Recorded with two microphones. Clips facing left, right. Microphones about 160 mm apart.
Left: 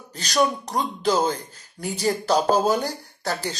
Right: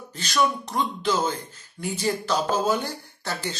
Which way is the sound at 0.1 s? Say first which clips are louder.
Left 2 dB; 40° left (ahead or behind).